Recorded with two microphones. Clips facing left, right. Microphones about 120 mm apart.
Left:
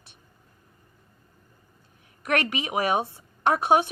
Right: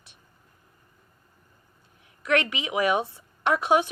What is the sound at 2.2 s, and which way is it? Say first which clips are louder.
Speech: right 1 dB; 50° left (ahead or behind).